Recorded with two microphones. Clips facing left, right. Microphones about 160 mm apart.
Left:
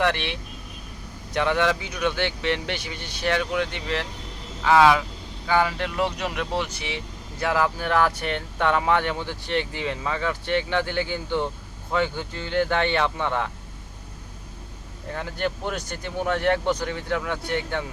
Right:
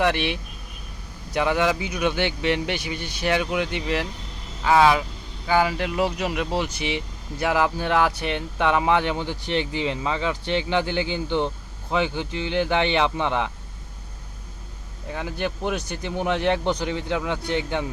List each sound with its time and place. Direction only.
0.0 s speech: 10° right (ahead or behind)
15.1 s a man's voice: 10° right (ahead or behind)